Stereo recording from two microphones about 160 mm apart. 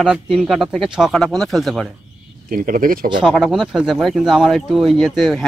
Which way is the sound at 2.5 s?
60° right (ahead or behind).